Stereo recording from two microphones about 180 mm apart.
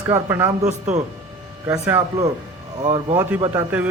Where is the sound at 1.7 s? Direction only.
10° right (ahead or behind).